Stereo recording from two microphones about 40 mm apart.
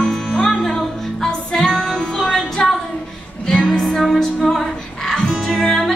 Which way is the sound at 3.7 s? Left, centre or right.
Centre.